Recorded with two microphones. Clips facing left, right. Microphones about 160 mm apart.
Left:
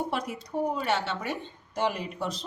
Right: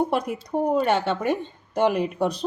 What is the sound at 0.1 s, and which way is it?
Speech, 55° right (ahead or behind).